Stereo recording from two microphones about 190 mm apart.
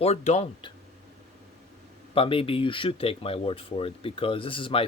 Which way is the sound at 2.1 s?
30° left (ahead or behind).